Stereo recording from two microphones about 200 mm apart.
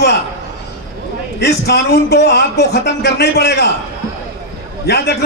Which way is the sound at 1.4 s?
55° left (ahead or behind).